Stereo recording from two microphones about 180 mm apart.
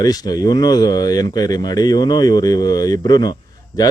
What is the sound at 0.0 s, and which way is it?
Speech, 20° left (ahead or behind).